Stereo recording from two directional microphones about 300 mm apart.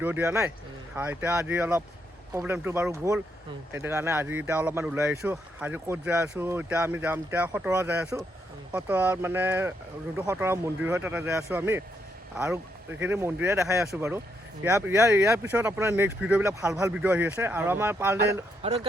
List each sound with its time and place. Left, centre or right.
0.0 s speech: centre
18.6 s speech: centre